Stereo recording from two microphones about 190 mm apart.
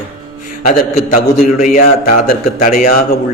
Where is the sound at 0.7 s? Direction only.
45° left (ahead or behind).